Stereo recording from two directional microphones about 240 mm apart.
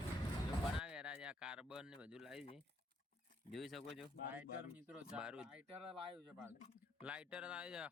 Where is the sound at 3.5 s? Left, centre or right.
Centre.